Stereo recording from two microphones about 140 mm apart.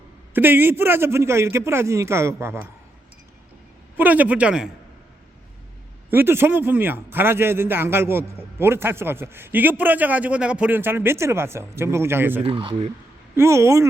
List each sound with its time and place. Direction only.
0.3 s a man's voice: 15° right (ahead or behind)
3.9 s a man's voice: 10° right (ahead or behind)
6.1 s a man's voice: 15° right (ahead or behind)
12.4 s speech: 40° right (ahead or behind)
13.3 s a woman's voice: 20° right (ahead or behind)